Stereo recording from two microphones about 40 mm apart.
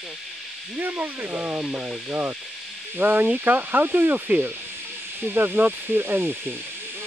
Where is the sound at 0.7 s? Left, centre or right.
Right.